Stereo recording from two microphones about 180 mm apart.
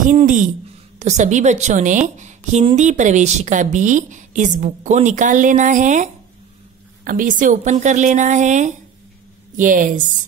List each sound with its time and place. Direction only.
0.0 s a woman's voice: 45° right (ahead or behind)
7.1 s a woman's voice: 50° right (ahead or behind)